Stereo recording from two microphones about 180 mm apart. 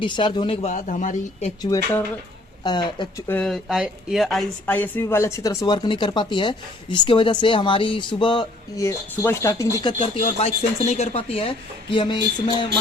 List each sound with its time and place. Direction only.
0.0 s a woman's voice: 25° left (ahead or behind)
1.7 s speech: 10° left (ahead or behind)
2.6 s speech: 25° left (ahead or behind)
3.2 s speech: 5° left (ahead or behind)
9.8 s a woman's voice: 30° left (ahead or behind)